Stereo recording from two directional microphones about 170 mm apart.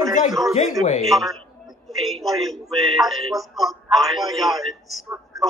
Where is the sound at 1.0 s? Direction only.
Centre (ahead or behind).